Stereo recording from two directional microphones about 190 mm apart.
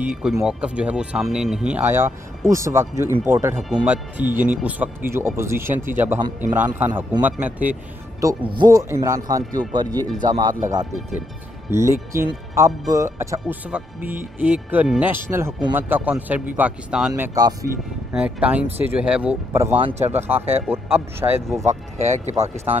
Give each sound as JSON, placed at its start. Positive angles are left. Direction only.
{"t": 0.1, "sound": "speech", "side_deg": 0}
{"t": 11.7, "sound": "speech", "side_deg": -15}
{"t": 17.1, "sound": "speech", "side_deg": -15}
{"t": 18.1, "sound": "speech", "side_deg": -5}
{"t": 19.8, "sound": "speech", "side_deg": -35}
{"t": 20.7, "sound": "speech", "side_deg": -10}
{"t": 21.6, "sound": "speech", "side_deg": -40}